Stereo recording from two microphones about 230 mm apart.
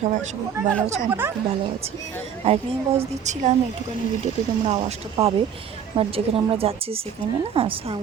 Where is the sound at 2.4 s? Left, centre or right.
Right.